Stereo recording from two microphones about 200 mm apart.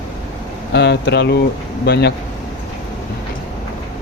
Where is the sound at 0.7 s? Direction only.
55° left (ahead or behind).